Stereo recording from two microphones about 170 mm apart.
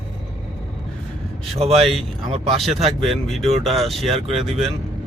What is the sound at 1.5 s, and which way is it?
Speech, 35° right (ahead or behind).